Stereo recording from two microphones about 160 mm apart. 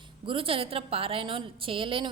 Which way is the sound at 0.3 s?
35° right (ahead or behind).